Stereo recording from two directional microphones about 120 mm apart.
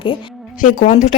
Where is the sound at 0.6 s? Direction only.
90° left.